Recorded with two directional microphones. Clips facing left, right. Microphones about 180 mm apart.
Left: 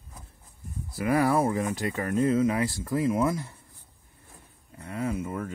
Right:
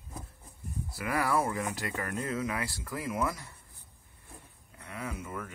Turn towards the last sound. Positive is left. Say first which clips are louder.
# left 8 dB
turn(degrees=30)  # may be behind; listen again after turning